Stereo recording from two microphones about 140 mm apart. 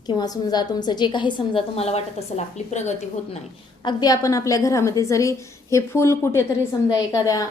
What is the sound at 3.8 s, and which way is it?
A woman's voice, 25° left (ahead or behind).